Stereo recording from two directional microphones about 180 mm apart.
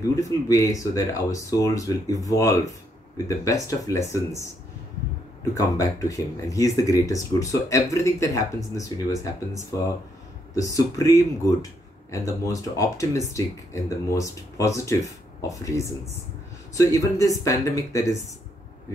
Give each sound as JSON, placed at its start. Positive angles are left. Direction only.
{"t": 0.0, "sound": "speech", "side_deg": 20}
{"t": 5.5, "sound": "speech", "side_deg": 20}